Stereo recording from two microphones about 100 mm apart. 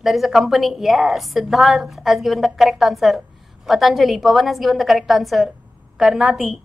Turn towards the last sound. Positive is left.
turn(degrees=0)  # may be behind; listen again after turning